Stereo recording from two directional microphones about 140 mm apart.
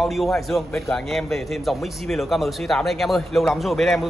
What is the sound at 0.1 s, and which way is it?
A man's voice, centre (ahead or behind).